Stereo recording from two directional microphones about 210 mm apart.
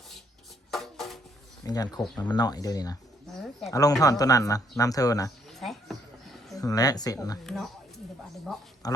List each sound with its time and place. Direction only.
0.7 s music: centre (ahead or behind)
1.6 s speech: 15° left (ahead or behind)
3.2 s speech: centre (ahead or behind)
3.7 s speech: 15° left (ahead or behind)
5.5 s a sound: centre (ahead or behind)
6.6 s speech: 15° left (ahead or behind)
7.4 s speech: centre (ahead or behind)